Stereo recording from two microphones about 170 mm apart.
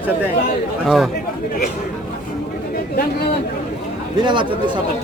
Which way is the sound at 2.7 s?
65° left (ahead or behind).